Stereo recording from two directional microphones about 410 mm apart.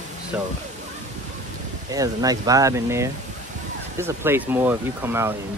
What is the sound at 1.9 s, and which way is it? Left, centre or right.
Speech, centre.